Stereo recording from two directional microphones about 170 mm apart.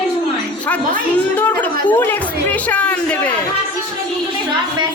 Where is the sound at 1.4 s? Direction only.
10° left (ahead or behind).